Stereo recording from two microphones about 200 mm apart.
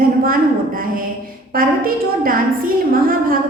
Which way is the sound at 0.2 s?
45° right (ahead or behind).